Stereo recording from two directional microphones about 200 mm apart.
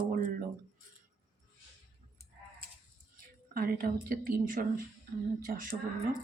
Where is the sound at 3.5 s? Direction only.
50° right (ahead or behind).